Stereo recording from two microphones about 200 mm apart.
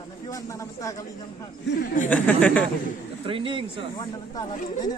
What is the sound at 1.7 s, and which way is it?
Speech, 60° left (ahead or behind).